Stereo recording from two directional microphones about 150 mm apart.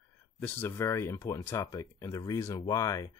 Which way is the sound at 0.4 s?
15° left (ahead or behind).